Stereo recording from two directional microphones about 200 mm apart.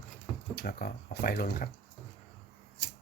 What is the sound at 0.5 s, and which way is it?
Speech, 50° left (ahead or behind).